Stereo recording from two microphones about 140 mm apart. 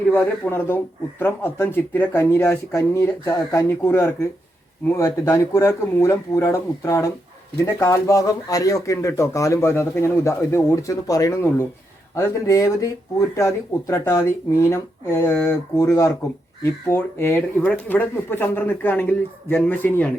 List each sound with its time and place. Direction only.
0.1 s speech: 15° left (ahead or behind)